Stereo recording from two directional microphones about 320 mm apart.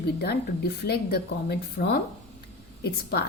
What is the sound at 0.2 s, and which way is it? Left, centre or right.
A woman's voice, left.